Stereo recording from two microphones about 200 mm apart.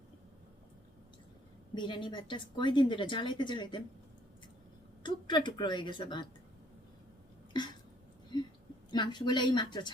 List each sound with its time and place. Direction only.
1.7 s a woman's voice: 25° left (ahead or behind)
5.0 s a woman's voice: 25° left (ahead or behind)
7.5 s throat clearing: 20° left (ahead or behind)
8.3 s a sound: 25° left (ahead or behind)
8.9 s a woman's voice: 20° left (ahead or behind)